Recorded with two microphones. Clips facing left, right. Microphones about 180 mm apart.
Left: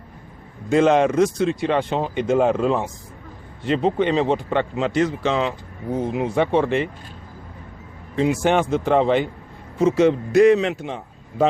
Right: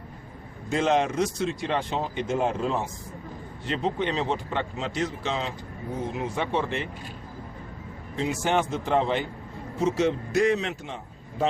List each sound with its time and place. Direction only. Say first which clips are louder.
0.7 s speech: left 7 dB; 60° left (ahead or behind); by 2.7 s 80° left
3.7 s speech: left 8 dB; 60° left (ahead or behind)
8.2 s a man's voice: left 7 dB; 60° left (ahead or behind); by 9.2 s 80° left
9.8 s a man's voice: left 7 dB; 70° left (ahead or behind)